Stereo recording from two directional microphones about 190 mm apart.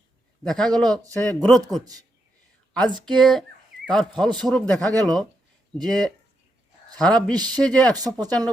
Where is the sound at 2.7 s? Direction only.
5° left (ahead or behind).